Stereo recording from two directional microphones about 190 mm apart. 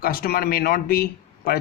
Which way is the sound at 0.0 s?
50° left (ahead or behind).